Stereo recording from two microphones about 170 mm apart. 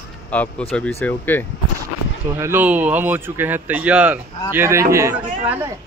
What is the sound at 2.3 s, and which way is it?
Speech, 15° right (ahead or behind).